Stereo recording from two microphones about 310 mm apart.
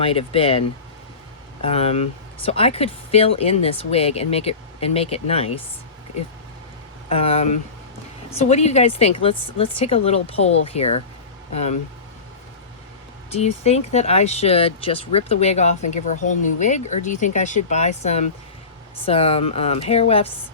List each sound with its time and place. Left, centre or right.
0.0 s speech: centre
1.6 s speech: centre
7.1 s speech: centre
13.3 s speech: left